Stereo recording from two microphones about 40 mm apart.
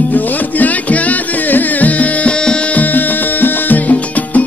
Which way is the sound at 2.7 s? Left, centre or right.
Left.